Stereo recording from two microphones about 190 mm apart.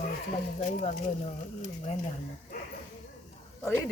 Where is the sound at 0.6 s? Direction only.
35° left (ahead or behind).